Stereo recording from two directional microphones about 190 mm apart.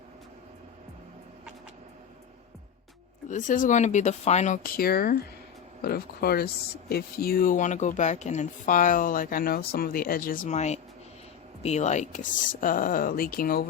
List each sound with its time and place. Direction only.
3.2 s speech: 40° left (ahead or behind)